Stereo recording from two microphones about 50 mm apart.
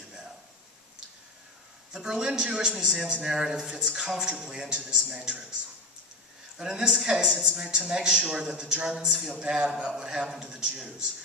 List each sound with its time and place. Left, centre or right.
1.9 s a man's voice: centre
6.6 s a man's voice: centre